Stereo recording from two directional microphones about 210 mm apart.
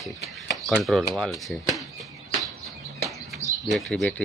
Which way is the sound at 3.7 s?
Centre (ahead or behind).